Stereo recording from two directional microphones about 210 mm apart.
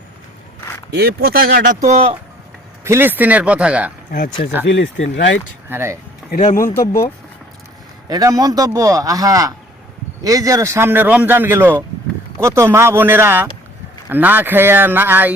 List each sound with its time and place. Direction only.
0.9 s speech: 50° right (ahead or behind)
1.9 s speech: 30° right (ahead or behind)
2.8 s speech: 10° right (ahead or behind)
4.6 s speech: 60° left (ahead or behind)
5.6 s speech: 10° right (ahead or behind)
6.3 s speech: 35° left (ahead or behind)
6.7 s speech: 15° left (ahead or behind)
8.1 s speech: 15° right (ahead or behind)